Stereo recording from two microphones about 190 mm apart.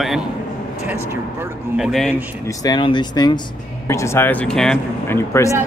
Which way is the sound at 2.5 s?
20° left (ahead or behind).